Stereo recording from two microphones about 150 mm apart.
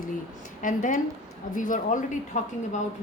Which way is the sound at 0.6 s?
60° left (ahead or behind).